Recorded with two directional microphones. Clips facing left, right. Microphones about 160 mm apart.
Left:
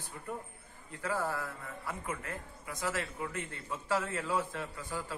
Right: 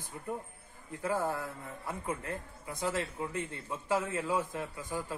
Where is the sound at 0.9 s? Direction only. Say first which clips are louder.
Right 2 dB; 20° right (ahead or behind).